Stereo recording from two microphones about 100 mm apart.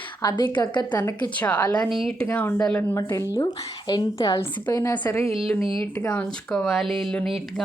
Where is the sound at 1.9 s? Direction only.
Centre (ahead or behind).